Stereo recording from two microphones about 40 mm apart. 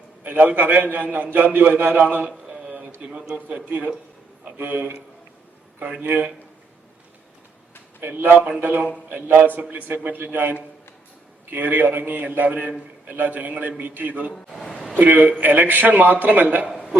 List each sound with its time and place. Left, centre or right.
0.2 s a man's voice: right
3.0 s a man's voice: right
3.5 s a man's voice: right
6.0 s a man's voice: right
8.0 s a man's voice: right
9.6 s a man's voice: right
14.3 s a man's voice: centre
14.9 s a man's voice: right